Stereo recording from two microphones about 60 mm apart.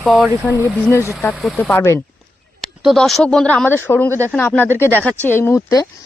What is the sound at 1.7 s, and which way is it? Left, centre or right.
Speech, left.